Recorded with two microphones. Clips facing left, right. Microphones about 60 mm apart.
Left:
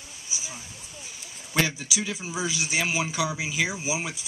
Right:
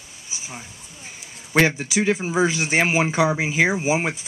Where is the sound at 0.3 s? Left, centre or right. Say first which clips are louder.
Right 3 dB; right.